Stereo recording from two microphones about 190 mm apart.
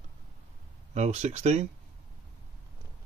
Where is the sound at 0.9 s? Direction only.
35° right (ahead or behind).